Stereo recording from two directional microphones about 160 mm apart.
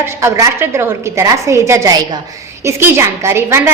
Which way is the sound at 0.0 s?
15° right (ahead or behind).